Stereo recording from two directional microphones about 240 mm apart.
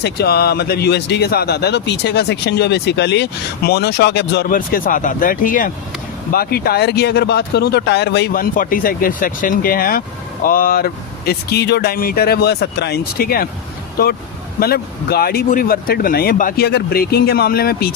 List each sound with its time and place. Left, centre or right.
0.0 s speech: left